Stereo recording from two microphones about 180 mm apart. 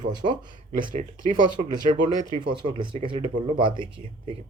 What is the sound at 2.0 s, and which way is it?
Speech, 40° right (ahead or behind).